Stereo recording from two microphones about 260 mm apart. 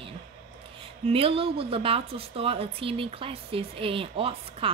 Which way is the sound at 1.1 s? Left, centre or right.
Right.